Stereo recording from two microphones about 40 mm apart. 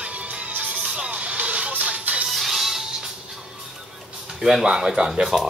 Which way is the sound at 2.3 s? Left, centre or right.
Centre.